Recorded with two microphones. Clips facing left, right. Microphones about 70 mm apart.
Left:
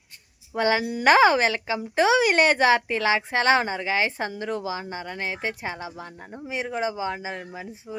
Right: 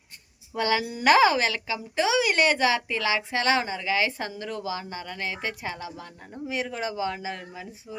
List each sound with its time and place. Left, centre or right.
0.5 s speech: left